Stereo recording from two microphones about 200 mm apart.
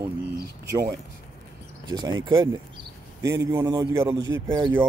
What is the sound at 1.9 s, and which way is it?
A man's voice, 20° right (ahead or behind).